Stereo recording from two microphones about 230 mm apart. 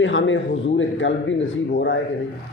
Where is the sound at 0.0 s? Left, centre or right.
Left.